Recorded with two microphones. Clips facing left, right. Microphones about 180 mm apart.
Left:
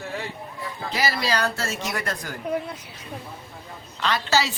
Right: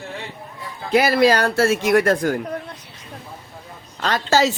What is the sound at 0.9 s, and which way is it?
Speech, 55° right (ahead or behind).